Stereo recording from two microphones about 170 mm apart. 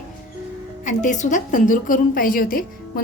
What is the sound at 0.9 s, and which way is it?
A woman's voice, 45° left (ahead or behind).